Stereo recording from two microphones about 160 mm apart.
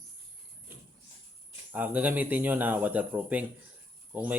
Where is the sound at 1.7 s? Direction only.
10° right (ahead or behind).